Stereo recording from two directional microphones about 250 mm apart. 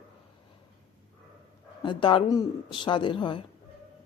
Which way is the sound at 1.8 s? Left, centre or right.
Centre.